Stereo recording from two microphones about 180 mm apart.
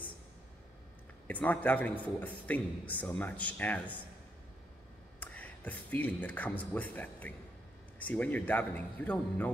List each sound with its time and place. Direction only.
1.2 s a man's voice: 10° left (ahead or behind)
5.2 s a man's voice: 10° left (ahead or behind)